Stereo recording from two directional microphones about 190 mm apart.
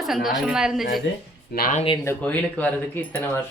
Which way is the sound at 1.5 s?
50° left (ahead or behind).